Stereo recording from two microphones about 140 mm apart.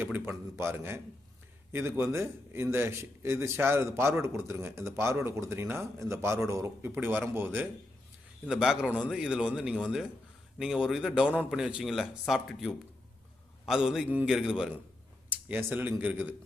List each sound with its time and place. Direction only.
0.0 s a man's voice: 15° right (ahead or behind)